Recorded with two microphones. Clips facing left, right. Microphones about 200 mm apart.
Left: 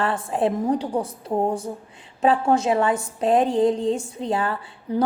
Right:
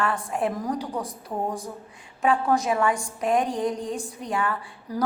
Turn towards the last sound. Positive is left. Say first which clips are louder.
# left 4 dB
turn(degrees=30)  # may be behind; listen again after turning